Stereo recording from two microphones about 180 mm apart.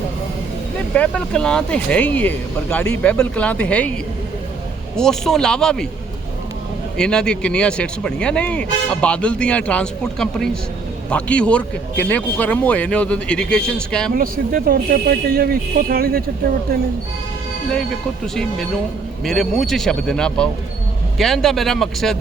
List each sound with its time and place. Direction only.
0.9 s speech: 5° left (ahead or behind)
4.9 s speech: 5° left (ahead or behind)
6.9 s speech: 5° left (ahead or behind)
14.1 s speech: 50° right (ahead or behind)
19.2 s speech: centre (ahead or behind)